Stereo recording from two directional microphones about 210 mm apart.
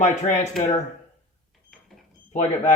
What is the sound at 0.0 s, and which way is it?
Speech, 35° left (ahead or behind).